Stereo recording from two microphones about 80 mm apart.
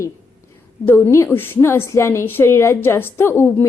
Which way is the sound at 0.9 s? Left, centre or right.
Left.